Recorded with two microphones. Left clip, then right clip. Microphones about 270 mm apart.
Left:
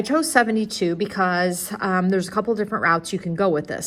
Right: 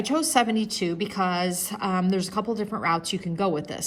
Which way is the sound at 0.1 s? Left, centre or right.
Left.